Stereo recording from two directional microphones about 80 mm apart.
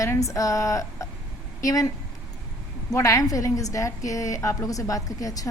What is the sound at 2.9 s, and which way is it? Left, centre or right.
A woman's voice, left.